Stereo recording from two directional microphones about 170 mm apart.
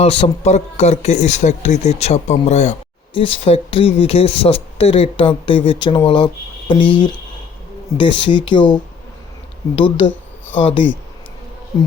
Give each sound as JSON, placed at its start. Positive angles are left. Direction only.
{"t": 0.0, "sound": "speech", "side_deg": 35}